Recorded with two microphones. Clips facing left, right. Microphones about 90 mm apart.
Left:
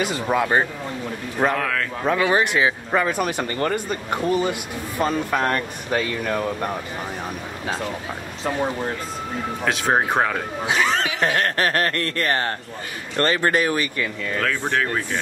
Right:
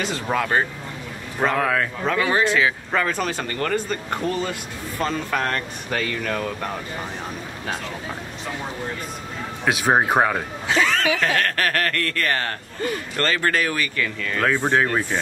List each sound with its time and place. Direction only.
0.0 s speech: 15° left (ahead or behind)
1.6 s speech: 15° right (ahead or behind)
2.0 s speech: 20° left (ahead or behind)
9.7 s speech: 10° right (ahead or behind)
10.7 s speech: 20° left (ahead or behind)
14.4 s speech: 20° right (ahead or behind)